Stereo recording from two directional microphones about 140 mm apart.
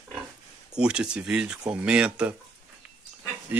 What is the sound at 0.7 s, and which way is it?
Speech, 5° right (ahead or behind).